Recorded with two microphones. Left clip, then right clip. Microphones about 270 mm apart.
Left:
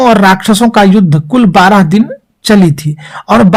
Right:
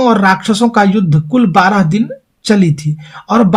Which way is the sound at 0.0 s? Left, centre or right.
Left.